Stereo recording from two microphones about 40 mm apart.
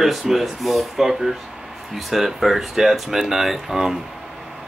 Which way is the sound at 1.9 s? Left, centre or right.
Centre.